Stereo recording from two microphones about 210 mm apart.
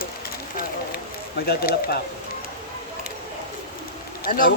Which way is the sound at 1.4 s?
45° left (ahead or behind).